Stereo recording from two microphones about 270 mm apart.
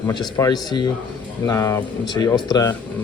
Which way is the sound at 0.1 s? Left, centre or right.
Centre.